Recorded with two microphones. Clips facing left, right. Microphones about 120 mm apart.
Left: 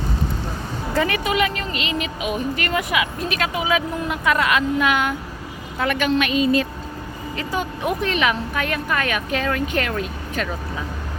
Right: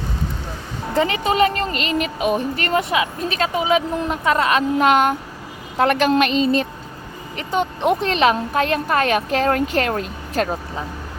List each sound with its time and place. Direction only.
0.9 s a woman's voice: 25° right (ahead or behind); by 6.2 s 40° right (ahead or behind)
7.3 s speech: 25° right (ahead or behind)